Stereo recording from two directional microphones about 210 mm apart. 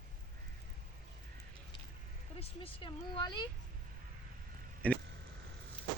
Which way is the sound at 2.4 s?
25° left (ahead or behind).